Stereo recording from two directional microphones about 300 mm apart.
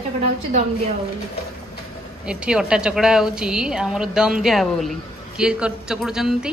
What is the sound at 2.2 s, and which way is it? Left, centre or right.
A woman's voice, centre.